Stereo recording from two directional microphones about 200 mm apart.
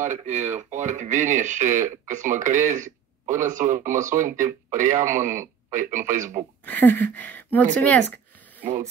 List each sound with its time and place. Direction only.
0.0 s speech: 35° right (ahead or behind)
6.6 s speech: 10° left (ahead or behind)